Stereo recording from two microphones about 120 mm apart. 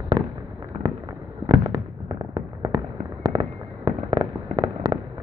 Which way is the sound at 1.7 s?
40° right (ahead or behind).